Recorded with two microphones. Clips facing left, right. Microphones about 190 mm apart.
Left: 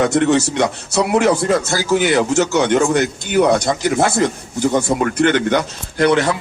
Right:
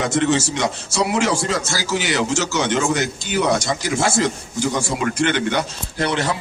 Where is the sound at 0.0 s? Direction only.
60° left (ahead or behind).